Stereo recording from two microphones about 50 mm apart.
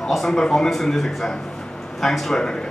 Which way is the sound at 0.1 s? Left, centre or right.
Centre.